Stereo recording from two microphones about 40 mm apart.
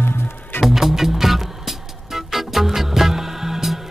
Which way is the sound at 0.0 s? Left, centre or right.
Left.